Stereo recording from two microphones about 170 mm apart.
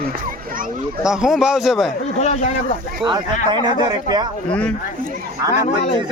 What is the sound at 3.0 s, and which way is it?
Speech, 25° right (ahead or behind).